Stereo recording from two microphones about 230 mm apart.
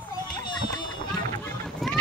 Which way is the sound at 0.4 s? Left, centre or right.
Centre.